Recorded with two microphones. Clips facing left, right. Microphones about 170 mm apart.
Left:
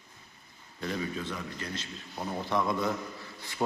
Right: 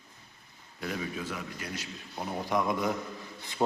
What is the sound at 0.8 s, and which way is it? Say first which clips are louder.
A man's voice: left 1 dB; 5° right (ahead or behind).